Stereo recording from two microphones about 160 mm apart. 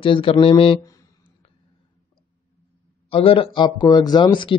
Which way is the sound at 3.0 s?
35° left (ahead or behind).